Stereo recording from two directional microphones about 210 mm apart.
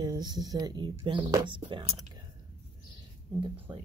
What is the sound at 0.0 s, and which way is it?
Speech, 20° right (ahead or behind).